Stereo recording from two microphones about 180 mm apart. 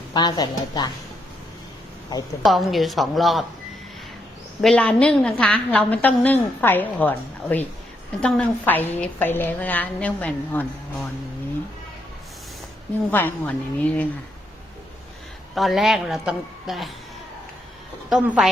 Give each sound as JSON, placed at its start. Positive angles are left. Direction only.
{"t": 0.1, "sound": "a woman's voice", "side_deg": 25}
{"t": 2.4, "sound": "a woman's voice", "side_deg": 0}
{"t": 4.6, "sound": "a woman's voice", "side_deg": 5}
{"t": 13.1, "sound": "a woman's voice", "side_deg": 10}
{"t": 15.5, "sound": "a woman's voice", "side_deg": 0}
{"t": 18.1, "sound": "a woman's voice", "side_deg": -5}